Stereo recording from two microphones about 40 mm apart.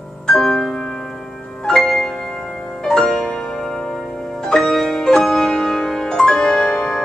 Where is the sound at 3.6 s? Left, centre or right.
Centre.